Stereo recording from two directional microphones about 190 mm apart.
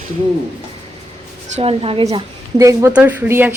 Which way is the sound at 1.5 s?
30° right (ahead or behind).